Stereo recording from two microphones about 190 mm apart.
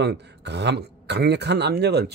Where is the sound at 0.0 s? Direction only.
65° right (ahead or behind).